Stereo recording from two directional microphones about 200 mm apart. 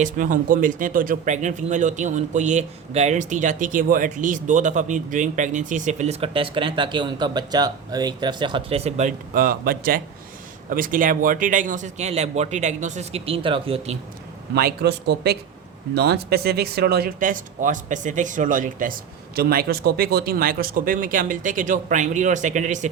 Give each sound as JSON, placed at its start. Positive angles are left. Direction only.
{"t": 0.0, "sound": "speech", "side_deg": -40}
{"t": 14.5, "sound": "speech", "side_deg": -55}